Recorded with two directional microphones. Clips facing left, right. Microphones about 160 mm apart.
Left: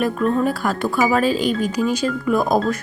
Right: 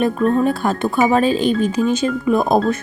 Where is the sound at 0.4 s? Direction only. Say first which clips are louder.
Right 3 dB; 25° right (ahead or behind).